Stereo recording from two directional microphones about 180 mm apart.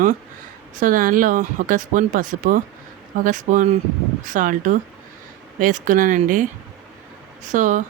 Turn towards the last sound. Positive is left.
turn(degrees=-45)  # may be behind; listen again after turning